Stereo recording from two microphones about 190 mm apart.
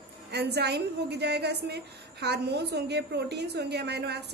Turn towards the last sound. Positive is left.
turn(degrees=-60)  # may be behind; listen again after turning